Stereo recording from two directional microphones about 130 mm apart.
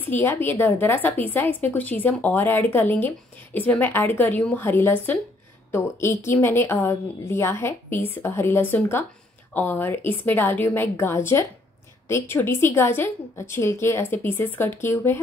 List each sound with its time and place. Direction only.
0.1 s speech: 15° left (ahead or behind)